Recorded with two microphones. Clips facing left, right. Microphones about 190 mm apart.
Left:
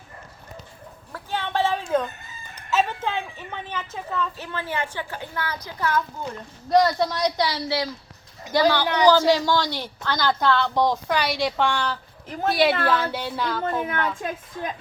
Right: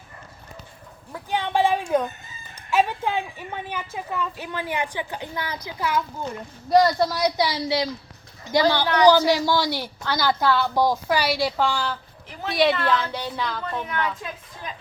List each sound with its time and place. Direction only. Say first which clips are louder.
1.1 s a sound: right 3 dB; 15° right (ahead or behind)
2.6 s a woman's voice: right 2 dB; 10° right (ahead or behind)
8.8 s speech: right 2 dB; 10° left (ahead or behind)
9.0 s a woman's voice: even; 15° right (ahead or behind)
12.7 s a woman's voice: left 1 dB; 50° left (ahead or behind)
13.1 s speech: left 2 dB; 5° left (ahead or behind)
13.8 s a woman's voice: left 2 dB; 50° left (ahead or behind)